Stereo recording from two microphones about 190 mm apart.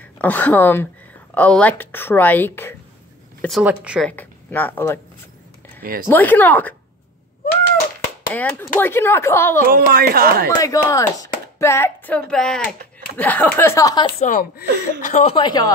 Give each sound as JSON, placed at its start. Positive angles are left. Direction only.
{"t": 0.2, "sound": "speech", "side_deg": 10}
{"t": 3.4, "sound": "speech", "side_deg": -5}
{"t": 4.1, "sound": "speech", "side_deg": 10}
{"t": 5.8, "sound": "speech", "side_deg": -50}
{"t": 6.0, "sound": "speech", "side_deg": 10}
{"t": 8.3, "sound": "speech", "side_deg": 10}
{"t": 9.7, "sound": "speech", "side_deg": -50}
{"t": 10.5, "sound": "speech", "side_deg": 20}
{"t": 11.5, "sound": "hands", "side_deg": 15}
{"t": 12.3, "sound": "speech", "side_deg": 5}
{"t": 14.2, "sound": "a woman's voice", "side_deg": 45}